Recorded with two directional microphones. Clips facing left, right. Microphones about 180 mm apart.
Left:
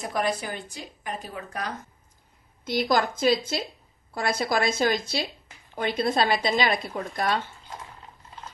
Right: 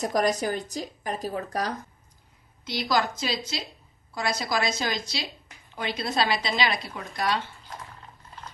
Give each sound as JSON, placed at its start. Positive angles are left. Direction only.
{"t": 0.0, "sound": "a woman's voice", "side_deg": -40}
{"t": 2.9, "sound": "a woman's voice", "side_deg": 50}